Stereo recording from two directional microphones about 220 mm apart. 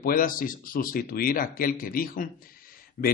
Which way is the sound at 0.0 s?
40° left (ahead or behind).